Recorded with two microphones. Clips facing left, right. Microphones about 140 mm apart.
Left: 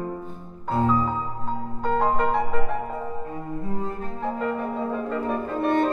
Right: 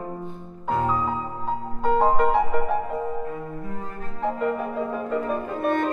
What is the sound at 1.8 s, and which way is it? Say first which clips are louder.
Music: right 3 dB; 5° right (ahead or behind).